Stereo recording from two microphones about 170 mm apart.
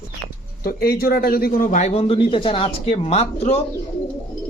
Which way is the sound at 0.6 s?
60° left (ahead or behind).